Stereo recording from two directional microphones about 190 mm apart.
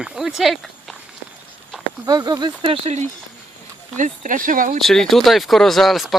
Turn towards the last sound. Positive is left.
turn(degrees=0)  # may be behind; listen again after turning